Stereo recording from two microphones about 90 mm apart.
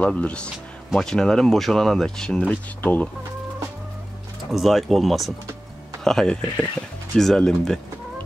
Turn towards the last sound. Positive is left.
turn(degrees=5)  # may be behind; listen again after turning